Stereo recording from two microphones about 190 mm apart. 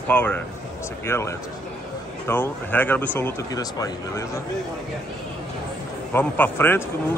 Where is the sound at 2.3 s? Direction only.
10° left (ahead or behind).